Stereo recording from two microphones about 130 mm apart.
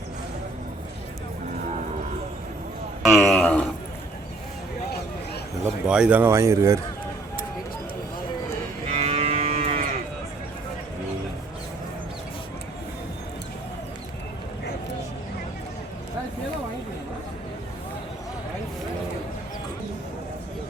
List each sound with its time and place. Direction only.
3.0 s a sound: centre (ahead or behind)
5.8 s speech: 5° right (ahead or behind); by 6.7 s 25° right (ahead or behind)
8.9 s moo: 55° right (ahead or behind)